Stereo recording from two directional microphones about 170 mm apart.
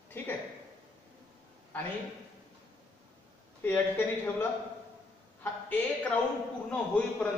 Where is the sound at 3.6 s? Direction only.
10° left (ahead or behind).